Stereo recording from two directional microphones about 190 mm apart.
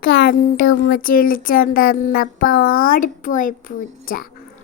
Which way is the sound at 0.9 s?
50° left (ahead or behind).